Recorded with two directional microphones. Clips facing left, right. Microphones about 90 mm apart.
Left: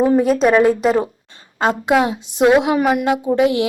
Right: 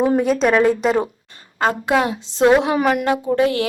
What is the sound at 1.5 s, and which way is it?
A woman's voice, 20° left (ahead or behind).